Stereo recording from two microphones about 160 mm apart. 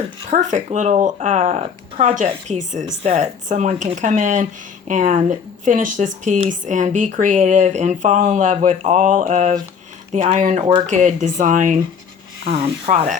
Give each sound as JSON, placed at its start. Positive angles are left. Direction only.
{"t": 0.3, "sound": "speech", "side_deg": -50}
{"t": 12.9, "sound": "speech", "side_deg": -50}